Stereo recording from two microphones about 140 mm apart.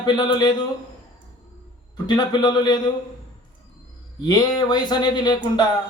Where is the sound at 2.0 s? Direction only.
30° left (ahead or behind).